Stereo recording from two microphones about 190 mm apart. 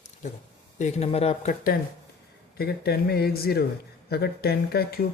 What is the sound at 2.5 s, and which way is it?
Speech, 55° left (ahead or behind).